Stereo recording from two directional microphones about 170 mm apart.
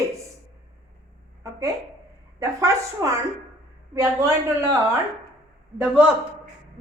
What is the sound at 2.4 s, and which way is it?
A woman's voice, 20° right (ahead or behind).